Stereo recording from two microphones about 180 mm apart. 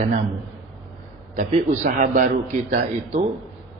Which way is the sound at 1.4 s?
45° right (ahead or behind).